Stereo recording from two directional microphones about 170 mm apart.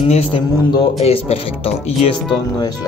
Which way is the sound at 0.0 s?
35° left (ahead or behind).